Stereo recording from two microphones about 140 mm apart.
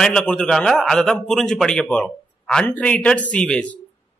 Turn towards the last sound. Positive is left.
turn(degrees=10)  # may be behind; listen again after turning